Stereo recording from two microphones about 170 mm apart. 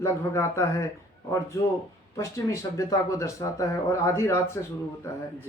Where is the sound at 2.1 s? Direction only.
20° left (ahead or behind).